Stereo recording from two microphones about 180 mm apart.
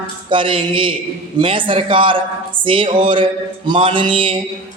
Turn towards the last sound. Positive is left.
turn(degrees=-30)  # may be behind; listen again after turning